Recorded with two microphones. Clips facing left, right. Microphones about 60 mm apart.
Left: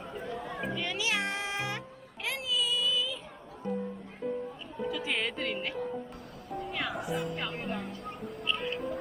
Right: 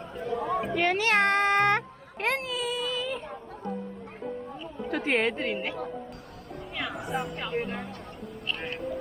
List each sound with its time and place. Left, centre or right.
0.2 s chatter: right
0.7 s a sound: right
2.2 s baby cry: right
4.9 s a woman's voice: right
5.3 s speech: right
6.5 s music: centre
7.6 s speech: centre